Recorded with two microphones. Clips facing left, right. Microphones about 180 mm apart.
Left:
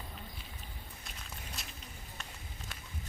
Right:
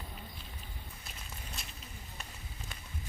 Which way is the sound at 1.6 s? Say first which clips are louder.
Left 1 dB; centre (ahead or behind).